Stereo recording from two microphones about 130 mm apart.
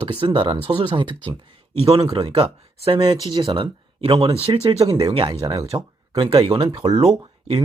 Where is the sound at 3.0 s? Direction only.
35° right (ahead or behind).